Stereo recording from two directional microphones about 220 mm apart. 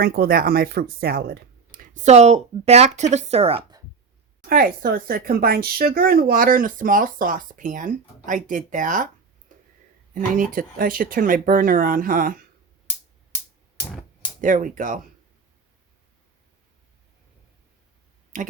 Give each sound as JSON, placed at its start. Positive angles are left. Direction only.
{"t": 0.0, "sound": "speech", "side_deg": -45}
{"t": 4.4, "sound": "speech", "side_deg": -40}
{"t": 10.2, "sound": "speech", "side_deg": -40}
{"t": 14.4, "sound": "speech", "side_deg": -35}
{"t": 18.3, "sound": "speech", "side_deg": -35}